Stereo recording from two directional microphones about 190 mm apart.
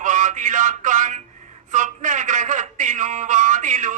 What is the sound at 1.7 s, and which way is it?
Speech, 40° right (ahead or behind).